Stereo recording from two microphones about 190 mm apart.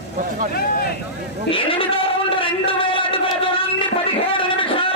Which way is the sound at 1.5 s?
30° left (ahead or behind).